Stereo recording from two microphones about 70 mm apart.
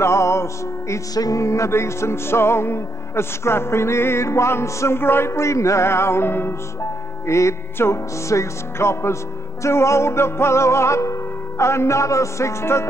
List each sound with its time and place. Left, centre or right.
0.0 s music: left
1.1 s music: left
7.2 s music: left